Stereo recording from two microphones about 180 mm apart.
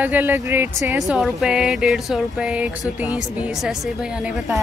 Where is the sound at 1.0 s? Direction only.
Centre (ahead or behind).